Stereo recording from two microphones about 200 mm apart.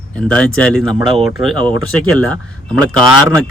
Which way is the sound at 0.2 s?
5° left (ahead or behind).